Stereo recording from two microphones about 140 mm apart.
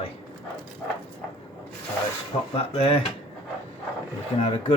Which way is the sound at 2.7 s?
45° left (ahead or behind).